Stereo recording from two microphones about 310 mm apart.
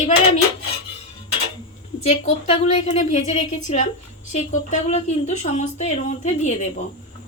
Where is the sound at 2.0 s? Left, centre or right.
Left.